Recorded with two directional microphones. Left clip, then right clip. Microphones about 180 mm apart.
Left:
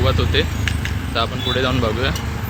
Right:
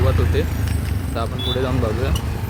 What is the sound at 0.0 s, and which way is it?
Speech, 20° left (ahead or behind).